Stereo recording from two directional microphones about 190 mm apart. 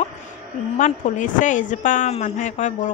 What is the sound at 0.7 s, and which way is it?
Speech, 40° left (ahead or behind).